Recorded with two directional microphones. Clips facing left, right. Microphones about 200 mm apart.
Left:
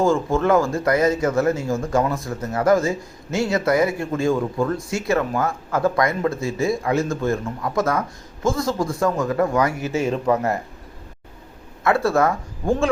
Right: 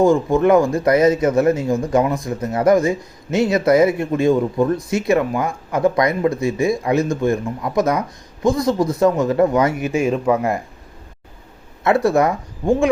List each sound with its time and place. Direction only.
0.0 s speech: 15° right (ahead or behind)
11.8 s speech: 20° right (ahead or behind)